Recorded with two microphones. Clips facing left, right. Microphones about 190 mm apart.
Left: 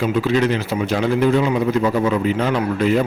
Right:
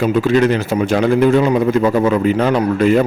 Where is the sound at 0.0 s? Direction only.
50° right (ahead or behind).